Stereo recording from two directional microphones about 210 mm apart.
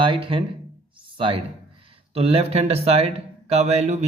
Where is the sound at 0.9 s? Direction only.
25° right (ahead or behind).